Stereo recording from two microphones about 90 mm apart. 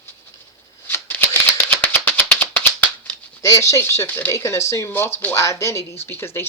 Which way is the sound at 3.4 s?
35° left (ahead or behind).